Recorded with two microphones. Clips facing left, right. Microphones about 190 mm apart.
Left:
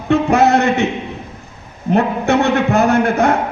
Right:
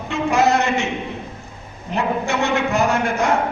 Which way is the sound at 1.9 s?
60° left (ahead or behind).